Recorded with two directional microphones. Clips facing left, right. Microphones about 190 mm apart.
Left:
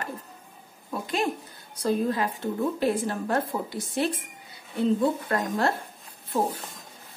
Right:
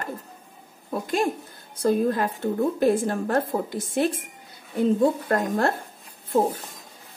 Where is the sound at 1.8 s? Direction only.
50° right (ahead or behind).